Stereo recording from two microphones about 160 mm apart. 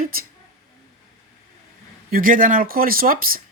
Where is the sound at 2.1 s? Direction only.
60° right (ahead or behind).